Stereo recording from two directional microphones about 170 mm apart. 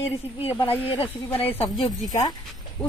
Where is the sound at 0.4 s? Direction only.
35° left (ahead or behind).